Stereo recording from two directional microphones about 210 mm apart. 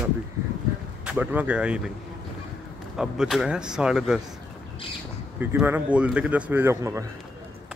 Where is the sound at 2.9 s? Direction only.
Centre (ahead or behind).